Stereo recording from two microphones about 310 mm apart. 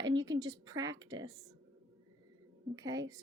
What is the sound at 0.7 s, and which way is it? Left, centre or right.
Speech, centre.